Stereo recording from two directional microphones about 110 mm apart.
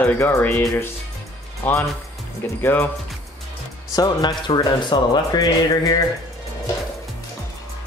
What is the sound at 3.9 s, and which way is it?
Speech, 40° left (ahead or behind).